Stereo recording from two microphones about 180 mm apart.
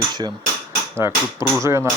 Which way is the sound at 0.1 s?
25° right (ahead or behind).